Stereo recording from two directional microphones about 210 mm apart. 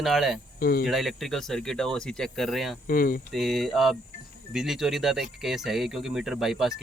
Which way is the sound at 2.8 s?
45° left (ahead or behind).